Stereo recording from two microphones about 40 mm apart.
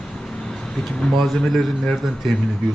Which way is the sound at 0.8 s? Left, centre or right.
Centre.